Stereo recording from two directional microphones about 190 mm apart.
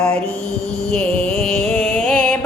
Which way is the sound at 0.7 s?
35° right (ahead or behind).